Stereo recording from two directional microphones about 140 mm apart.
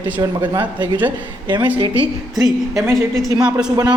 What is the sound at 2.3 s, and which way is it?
A woman's voice, centre (ahead or behind).